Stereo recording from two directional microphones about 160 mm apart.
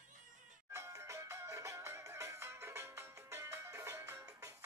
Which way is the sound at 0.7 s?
15° right (ahead or behind).